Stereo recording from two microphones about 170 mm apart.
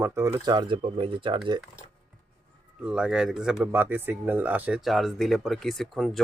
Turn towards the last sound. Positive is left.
turn(degrees=0)  # may be behind; listen again after turning